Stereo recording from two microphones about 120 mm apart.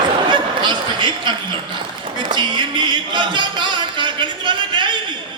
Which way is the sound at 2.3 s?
40° right (ahead or behind).